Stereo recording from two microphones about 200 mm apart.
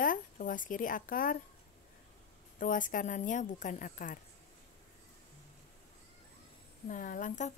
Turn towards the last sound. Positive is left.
turn(degrees=40)  # may be behind; listen again after turning